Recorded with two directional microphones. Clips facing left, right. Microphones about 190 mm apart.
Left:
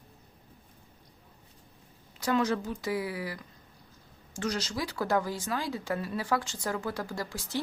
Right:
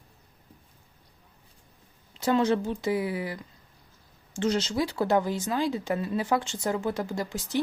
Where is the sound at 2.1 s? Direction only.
25° right (ahead or behind).